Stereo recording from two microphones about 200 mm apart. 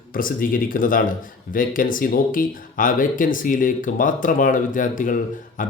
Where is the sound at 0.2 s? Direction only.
45° left (ahead or behind).